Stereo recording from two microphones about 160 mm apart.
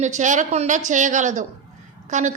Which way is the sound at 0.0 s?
50° right (ahead or behind).